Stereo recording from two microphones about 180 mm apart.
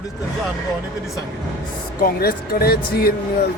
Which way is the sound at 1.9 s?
55° left (ahead or behind).